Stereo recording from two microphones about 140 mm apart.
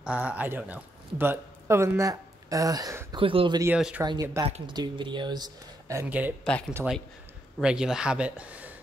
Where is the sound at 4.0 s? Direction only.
15° right (ahead or behind).